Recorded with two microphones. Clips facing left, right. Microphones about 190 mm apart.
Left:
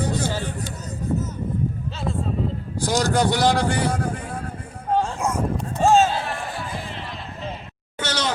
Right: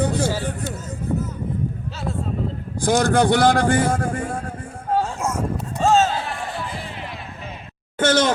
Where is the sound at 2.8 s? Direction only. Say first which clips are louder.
Right 4 dB; 55° right (ahead or behind).